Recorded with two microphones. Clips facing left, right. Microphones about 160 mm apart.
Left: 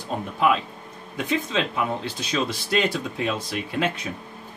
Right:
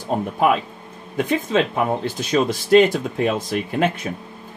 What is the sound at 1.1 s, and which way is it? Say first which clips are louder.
Speech: right 6 dB; 50° right (ahead or behind).